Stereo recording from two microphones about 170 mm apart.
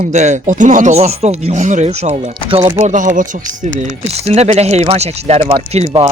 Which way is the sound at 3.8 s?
35° right (ahead or behind).